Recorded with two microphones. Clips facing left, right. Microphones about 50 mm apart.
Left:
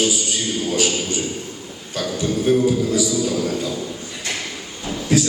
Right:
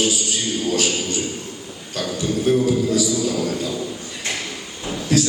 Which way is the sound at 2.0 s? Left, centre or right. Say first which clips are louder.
Even; centre.